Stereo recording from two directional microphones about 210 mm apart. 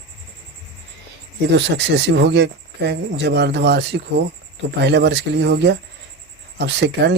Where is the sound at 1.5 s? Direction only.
55° right (ahead or behind).